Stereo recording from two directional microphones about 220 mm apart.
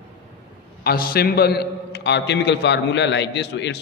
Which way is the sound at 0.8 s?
45° left (ahead or behind).